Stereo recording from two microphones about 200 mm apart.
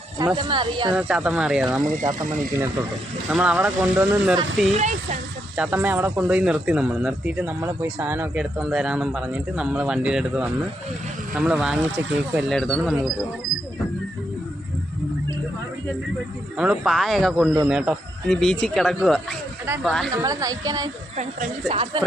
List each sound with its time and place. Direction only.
0.3 s speech: 25° right (ahead or behind)
0.9 s speech: 5° right (ahead or behind)
1.8 s speech: 40° right (ahead or behind)
3.2 s a woman's voice: 5° right (ahead or behind)
16.6 s speech: 5° right (ahead or behind)
20.1 s a woman's voice: 15° right (ahead or behind)
21.2 s speech: 30° right (ahead or behind)